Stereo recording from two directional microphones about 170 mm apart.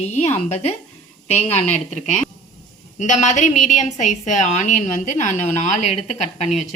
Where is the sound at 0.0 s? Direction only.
40° left (ahead or behind).